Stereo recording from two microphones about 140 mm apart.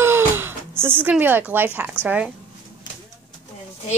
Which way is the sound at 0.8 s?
15° right (ahead or behind).